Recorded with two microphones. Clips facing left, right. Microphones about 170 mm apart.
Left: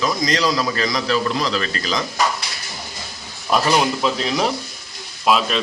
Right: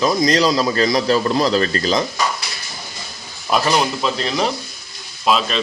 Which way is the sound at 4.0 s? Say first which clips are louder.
Even; 5° left (ahead or behind).